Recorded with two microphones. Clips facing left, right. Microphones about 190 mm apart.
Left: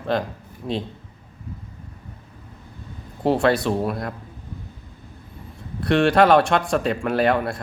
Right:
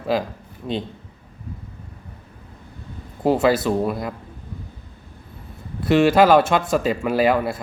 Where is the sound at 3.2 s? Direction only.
5° right (ahead or behind).